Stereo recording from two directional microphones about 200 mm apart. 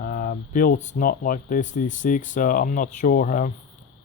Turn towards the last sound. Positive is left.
turn(degrees=40)  # may be behind; listen again after turning